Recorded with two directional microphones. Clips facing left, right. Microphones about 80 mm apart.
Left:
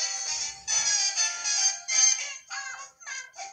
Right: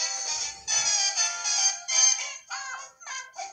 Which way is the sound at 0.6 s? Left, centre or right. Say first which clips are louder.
Right 2 dB; centre.